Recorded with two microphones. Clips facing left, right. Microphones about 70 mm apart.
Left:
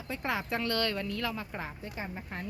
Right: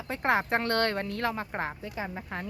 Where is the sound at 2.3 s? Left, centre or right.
Right.